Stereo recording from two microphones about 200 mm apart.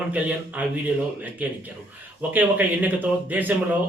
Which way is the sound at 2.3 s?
10° right (ahead or behind).